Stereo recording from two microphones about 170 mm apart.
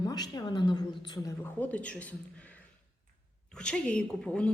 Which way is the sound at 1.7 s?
10° left (ahead or behind).